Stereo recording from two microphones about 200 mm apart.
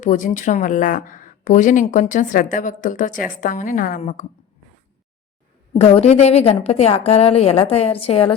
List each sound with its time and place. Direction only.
0.0 s a woman's voice: 40° left (ahead or behind)
5.7 s a woman's voice: 30° left (ahead or behind)